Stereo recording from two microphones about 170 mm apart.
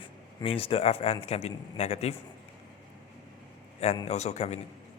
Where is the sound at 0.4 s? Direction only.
35° left (ahead or behind).